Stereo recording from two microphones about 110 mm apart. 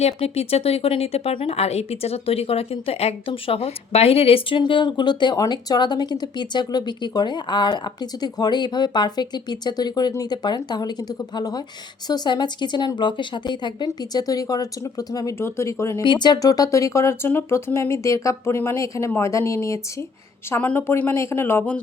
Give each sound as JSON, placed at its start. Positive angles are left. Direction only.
{"t": 0.0, "sound": "speech", "side_deg": 65}
{"t": 16.0, "sound": "speech", "side_deg": 40}
{"t": 20.5, "sound": "speech", "side_deg": 15}